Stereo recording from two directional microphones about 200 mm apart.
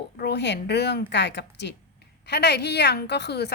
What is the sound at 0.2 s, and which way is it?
A woman's voice, 55° left (ahead or behind).